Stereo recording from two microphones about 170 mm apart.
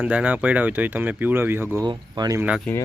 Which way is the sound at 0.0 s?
10° right (ahead or behind).